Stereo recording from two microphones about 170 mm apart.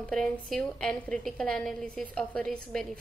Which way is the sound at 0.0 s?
5° left (ahead or behind).